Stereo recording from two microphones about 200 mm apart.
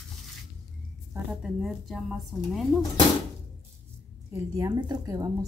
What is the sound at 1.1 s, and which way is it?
A woman's voice, 5° right (ahead or behind).